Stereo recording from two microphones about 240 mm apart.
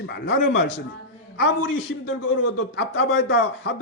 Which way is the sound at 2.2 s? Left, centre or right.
Left.